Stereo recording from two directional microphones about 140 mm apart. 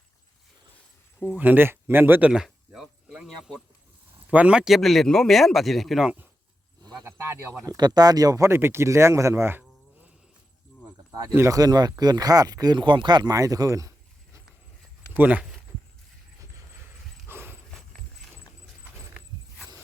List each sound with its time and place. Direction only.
1.4 s speech: 15° right (ahead or behind)
7.6 s speech: 25° right (ahead or behind)
11.1 s speech: 25° right (ahead or behind)
15.1 s speech: 10° right (ahead or behind)
17.2 s horse: 15° right (ahead or behind)